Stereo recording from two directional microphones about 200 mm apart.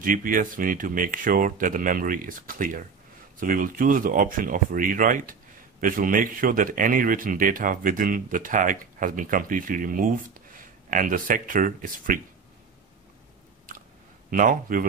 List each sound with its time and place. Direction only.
0.0 s speech: 45° right (ahead or behind)
14.3 s speech: 40° right (ahead or behind)